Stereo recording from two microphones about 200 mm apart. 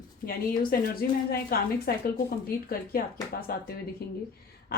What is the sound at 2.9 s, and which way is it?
Speech, 50° left (ahead or behind).